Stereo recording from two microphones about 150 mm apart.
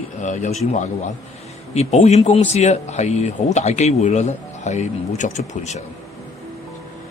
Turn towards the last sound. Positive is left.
turn(degrees=50)  # may be behind; listen again after turning